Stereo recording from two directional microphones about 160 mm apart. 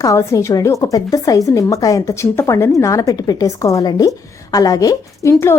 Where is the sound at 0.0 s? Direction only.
20° left (ahead or behind).